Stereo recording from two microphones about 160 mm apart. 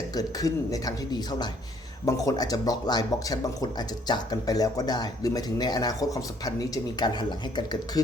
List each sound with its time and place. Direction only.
0.1 s speech: 20° left (ahead or behind)